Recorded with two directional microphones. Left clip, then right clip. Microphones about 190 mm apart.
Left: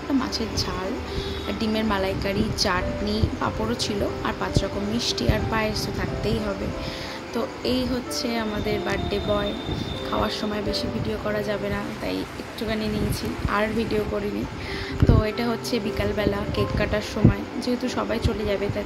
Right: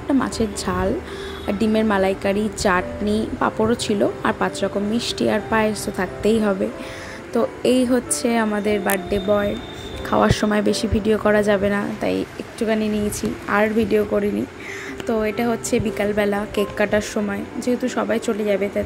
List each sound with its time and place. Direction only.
1.6 s speech: 30° right (ahead or behind)
10.1 s a woman's voice: 40° right (ahead or behind)